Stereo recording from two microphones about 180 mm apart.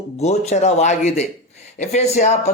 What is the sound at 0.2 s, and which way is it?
Speech, 40° left (ahead or behind).